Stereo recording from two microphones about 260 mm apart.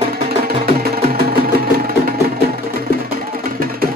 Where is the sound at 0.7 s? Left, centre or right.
Right.